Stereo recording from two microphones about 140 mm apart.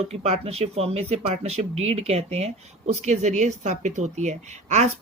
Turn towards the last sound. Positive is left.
turn(degrees=-55)  # may be behind; listen again after turning